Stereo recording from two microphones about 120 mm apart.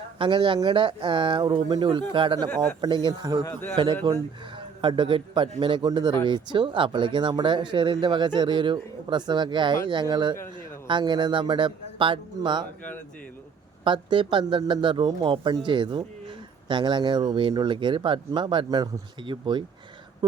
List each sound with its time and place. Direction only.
0.2 s speech: 45° right (ahead or behind)
3.5 s a man's voice: 15° left (ahead or behind)
4.5 s a man's voice: 45° right (ahead or behind)
13.8 s speech: 45° right (ahead or behind)